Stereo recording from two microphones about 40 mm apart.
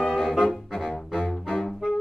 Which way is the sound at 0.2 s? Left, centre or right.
Centre.